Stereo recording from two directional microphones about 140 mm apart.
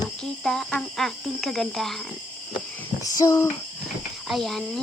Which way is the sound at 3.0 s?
25° left (ahead or behind).